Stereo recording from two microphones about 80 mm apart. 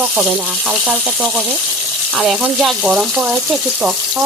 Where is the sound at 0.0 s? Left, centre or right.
Centre.